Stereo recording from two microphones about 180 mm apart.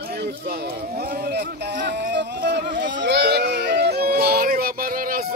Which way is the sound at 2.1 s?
75° right (ahead or behind).